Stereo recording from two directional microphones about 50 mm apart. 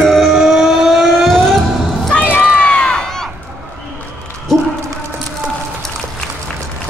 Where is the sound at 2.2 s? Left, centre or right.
Left.